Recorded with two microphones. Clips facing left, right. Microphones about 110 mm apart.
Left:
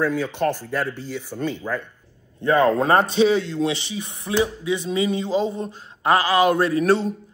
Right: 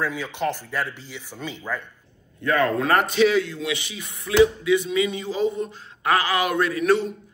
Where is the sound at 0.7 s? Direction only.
45° left (ahead or behind).